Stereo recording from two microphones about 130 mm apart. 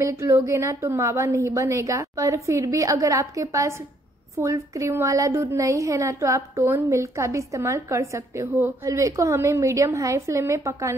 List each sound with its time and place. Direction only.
0.0 s a woman's voice: 20° right (ahead or behind)